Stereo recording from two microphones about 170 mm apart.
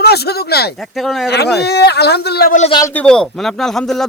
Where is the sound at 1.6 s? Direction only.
75° left (ahead or behind).